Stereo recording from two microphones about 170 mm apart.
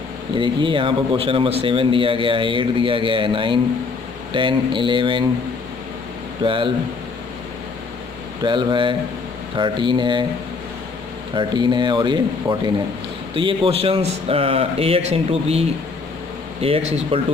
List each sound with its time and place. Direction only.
0.3 s speech: 30° right (ahead or behind)
6.4 s speech: 30° right (ahead or behind)
8.4 s speech: 30° right (ahead or behind)
11.3 s speech: 25° right (ahead or behind)
16.6 s speech: 35° right (ahead or behind)